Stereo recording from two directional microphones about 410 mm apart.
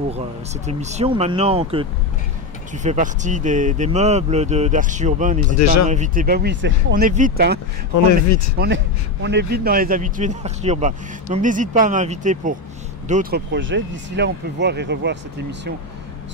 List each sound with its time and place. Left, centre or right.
0.7 s speech: centre
5.6 s speech: left
5.9 s a man's voice: centre
8.0 s speech: left
8.5 s a man's voice: right